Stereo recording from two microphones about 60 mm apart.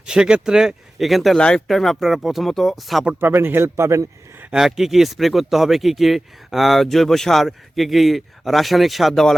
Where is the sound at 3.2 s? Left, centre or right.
Right.